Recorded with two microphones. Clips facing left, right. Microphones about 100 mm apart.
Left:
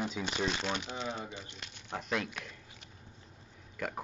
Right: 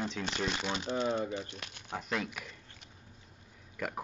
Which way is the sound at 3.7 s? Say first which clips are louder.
Right 1 dB; centre (ahead or behind).